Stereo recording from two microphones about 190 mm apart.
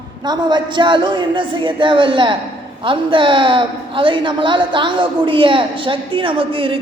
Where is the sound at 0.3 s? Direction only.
25° right (ahead or behind).